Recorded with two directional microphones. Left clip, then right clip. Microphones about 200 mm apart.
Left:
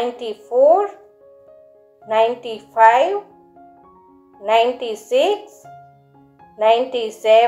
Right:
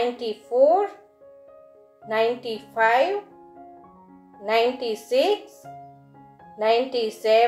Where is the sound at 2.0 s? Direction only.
Centre (ahead or behind).